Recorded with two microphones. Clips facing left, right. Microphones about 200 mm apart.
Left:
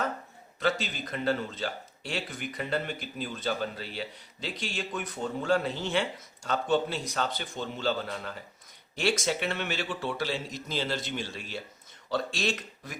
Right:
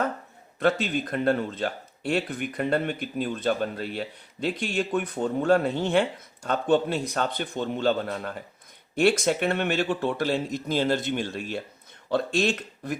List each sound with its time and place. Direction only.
0.6 s a man's voice: 55° right (ahead or behind)